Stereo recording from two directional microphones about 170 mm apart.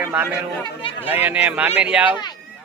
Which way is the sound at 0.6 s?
30° left (ahead or behind).